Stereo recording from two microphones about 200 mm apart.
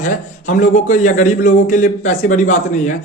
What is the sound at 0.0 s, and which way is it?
A man's voice, 40° left (ahead or behind).